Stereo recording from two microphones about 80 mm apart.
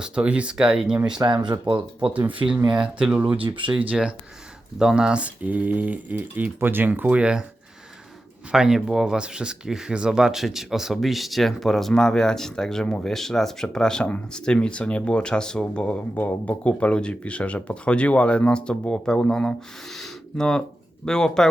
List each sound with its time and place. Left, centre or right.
0.0 s speech: centre
1.2 s speech: right
2.6 s speech: centre
3.4 s speech: right
3.7 s speech: centre
8.5 s speech: centre